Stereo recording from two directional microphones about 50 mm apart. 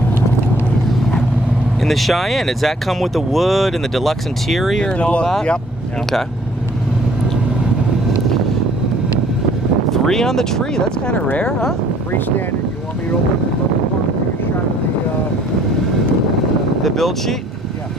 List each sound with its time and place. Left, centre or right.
1.8 s speech: centre
4.8 s speech: left
9.8 s speech: centre
16.8 s speech: centre